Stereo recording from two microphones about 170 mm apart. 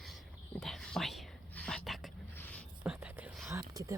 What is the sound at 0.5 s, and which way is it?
Whispering, centre (ahead or behind).